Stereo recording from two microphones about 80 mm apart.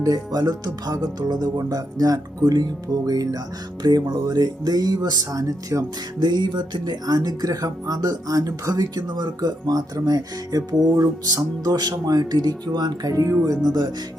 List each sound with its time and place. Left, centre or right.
0.0 s speech: right
6.1 s speech: right